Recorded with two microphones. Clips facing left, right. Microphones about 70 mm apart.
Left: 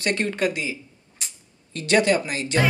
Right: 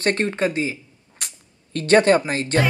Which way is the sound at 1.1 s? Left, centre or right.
Right.